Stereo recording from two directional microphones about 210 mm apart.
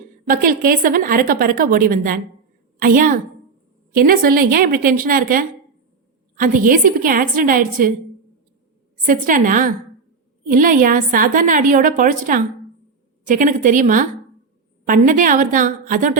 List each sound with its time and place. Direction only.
0.3 s a woman's voice: 40° right (ahead or behind)
9.0 s a woman's voice: 40° right (ahead or behind)